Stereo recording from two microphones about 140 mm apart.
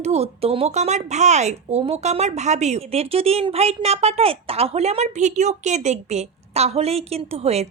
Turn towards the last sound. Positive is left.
turn(degrees=-50)  # may be behind; listen again after turning